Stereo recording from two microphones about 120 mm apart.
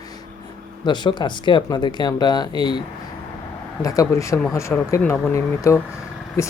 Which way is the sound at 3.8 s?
30° left (ahead or behind).